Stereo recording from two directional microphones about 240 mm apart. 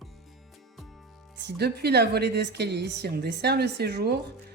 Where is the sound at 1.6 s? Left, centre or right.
Right.